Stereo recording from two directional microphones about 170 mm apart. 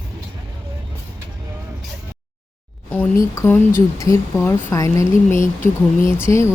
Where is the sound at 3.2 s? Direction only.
15° left (ahead or behind).